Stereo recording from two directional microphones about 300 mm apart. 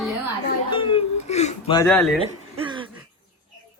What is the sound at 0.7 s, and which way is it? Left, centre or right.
Whimper, centre.